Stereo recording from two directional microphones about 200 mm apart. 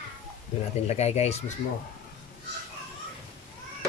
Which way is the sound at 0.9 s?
35° left (ahead or behind).